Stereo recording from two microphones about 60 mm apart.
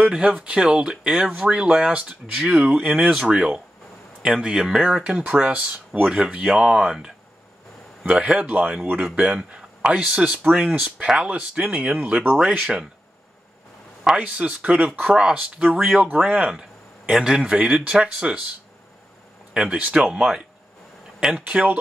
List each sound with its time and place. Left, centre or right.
0.1 s speech: centre
5.0 s speech: right
14.0 s speech: centre
19.5 s speech: centre